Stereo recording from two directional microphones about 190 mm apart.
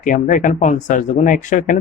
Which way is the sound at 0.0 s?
45° left (ahead or behind).